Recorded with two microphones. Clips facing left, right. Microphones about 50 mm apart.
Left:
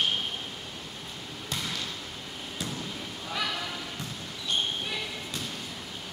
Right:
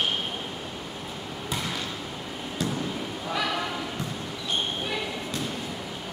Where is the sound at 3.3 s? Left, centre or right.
Centre.